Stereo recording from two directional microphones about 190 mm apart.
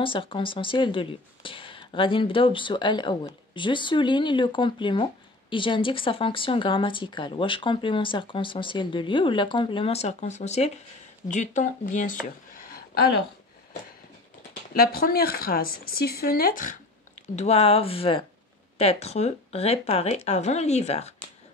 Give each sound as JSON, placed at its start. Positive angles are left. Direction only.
{"t": 0.0, "sound": "speech", "side_deg": 25}
{"t": 14.5, "sound": "speech", "side_deg": 50}
{"t": 17.4, "sound": "speech", "side_deg": 35}